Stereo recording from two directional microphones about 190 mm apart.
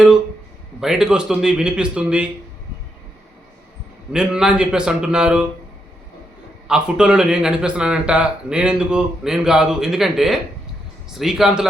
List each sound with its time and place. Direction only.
0.8 s speech: 5° right (ahead or behind)
4.1 s speech: 5° right (ahead or behind)
6.7 s speech: 5° right (ahead or behind)